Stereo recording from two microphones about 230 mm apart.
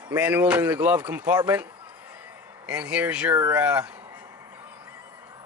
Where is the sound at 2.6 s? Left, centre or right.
Centre.